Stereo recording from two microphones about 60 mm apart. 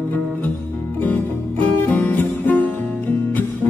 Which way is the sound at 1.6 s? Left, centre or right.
Left.